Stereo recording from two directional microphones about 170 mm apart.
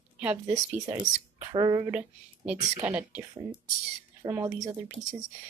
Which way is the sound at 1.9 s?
5° right (ahead or behind).